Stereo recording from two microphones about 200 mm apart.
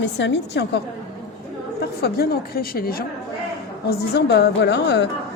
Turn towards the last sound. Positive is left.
turn(degrees=55)  # may be behind; listen again after turning